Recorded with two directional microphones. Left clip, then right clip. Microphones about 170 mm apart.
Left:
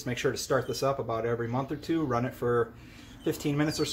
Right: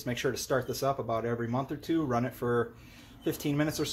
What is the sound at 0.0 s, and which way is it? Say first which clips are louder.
Speech: left 2 dB; 35° right (ahead or behind).